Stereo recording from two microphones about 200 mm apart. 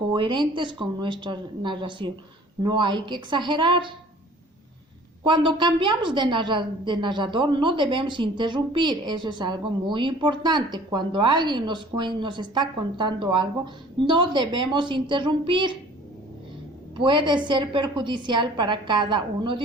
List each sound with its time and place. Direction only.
0.1 s a woman's voice: 25° right (ahead or behind)
5.2 s a woman's voice: 25° right (ahead or behind)
17.0 s a woman's voice: 25° right (ahead or behind)